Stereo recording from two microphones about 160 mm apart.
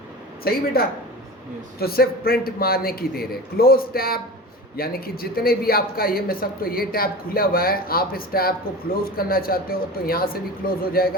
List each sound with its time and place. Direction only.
0.4 s a man's voice: 70° left (ahead or behind)